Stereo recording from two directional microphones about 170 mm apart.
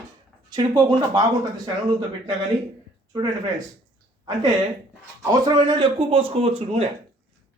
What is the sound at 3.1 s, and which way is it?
Speech, 20° right (ahead or behind).